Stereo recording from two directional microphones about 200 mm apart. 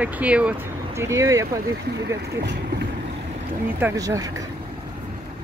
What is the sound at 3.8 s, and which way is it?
Speech, 15° right (ahead or behind).